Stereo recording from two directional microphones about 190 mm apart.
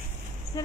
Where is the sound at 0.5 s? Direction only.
15° left (ahead or behind).